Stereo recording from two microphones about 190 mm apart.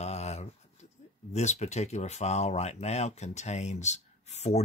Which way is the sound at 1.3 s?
35° left (ahead or behind).